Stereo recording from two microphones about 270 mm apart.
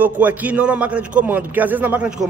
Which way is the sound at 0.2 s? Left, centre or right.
Centre.